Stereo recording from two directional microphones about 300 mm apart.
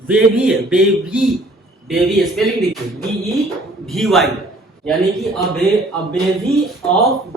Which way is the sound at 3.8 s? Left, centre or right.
Centre.